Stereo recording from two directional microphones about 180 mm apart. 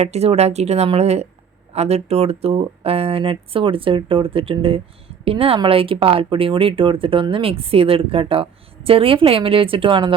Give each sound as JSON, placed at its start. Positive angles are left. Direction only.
{"t": 0.0, "sound": "speech", "side_deg": -35}